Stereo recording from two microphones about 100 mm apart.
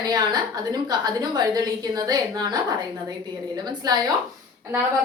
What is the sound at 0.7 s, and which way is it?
A woman's voice, 45° right (ahead or behind).